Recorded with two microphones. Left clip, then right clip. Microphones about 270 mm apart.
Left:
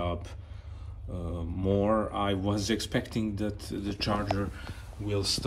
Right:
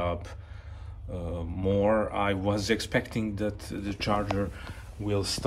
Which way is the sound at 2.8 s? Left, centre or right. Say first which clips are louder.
Right 3 dB; centre.